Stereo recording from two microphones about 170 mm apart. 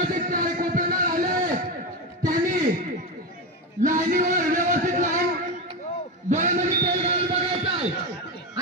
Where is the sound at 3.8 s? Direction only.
50° right (ahead or behind).